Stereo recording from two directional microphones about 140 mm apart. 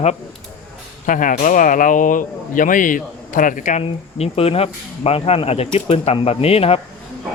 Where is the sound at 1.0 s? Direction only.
70° left (ahead or behind).